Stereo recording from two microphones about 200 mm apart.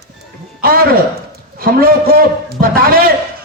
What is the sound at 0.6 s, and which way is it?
Speech, 50° right (ahead or behind).